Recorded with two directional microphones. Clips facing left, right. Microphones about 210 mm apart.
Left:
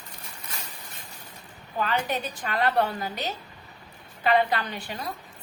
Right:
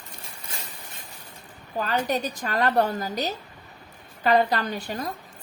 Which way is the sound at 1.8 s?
40° right (ahead or behind).